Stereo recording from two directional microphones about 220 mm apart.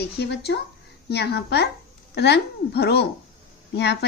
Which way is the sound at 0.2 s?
50° left (ahead or behind).